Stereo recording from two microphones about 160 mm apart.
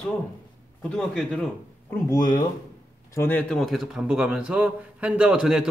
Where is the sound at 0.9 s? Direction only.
5° left (ahead or behind).